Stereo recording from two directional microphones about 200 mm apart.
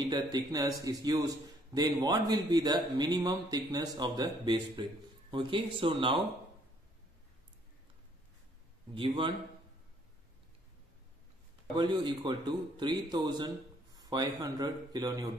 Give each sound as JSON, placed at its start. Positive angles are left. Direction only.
{"t": 0.0, "sound": "a man's voice", "side_deg": -20}
{"t": 8.9, "sound": "a man's voice", "side_deg": -25}
{"t": 11.7, "sound": "a man's voice", "side_deg": -25}